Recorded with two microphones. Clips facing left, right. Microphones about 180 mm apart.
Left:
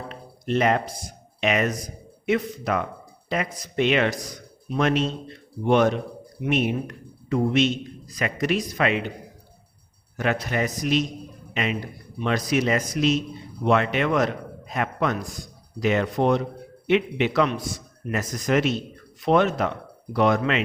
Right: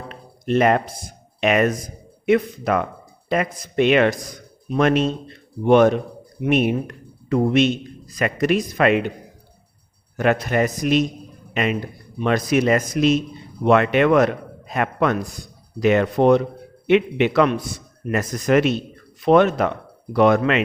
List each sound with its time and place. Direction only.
0.1 s a man's voice: 55° right (ahead or behind)
10.2 s a man's voice: 55° right (ahead or behind)